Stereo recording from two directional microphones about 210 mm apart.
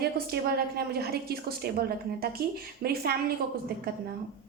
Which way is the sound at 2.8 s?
45° right (ahead or behind).